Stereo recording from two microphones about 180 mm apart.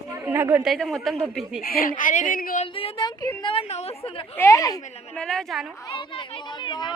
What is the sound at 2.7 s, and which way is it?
A woman's voice, 30° left (ahead or behind).